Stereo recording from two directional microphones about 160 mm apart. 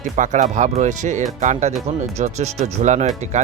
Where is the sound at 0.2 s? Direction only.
50° right (ahead or behind).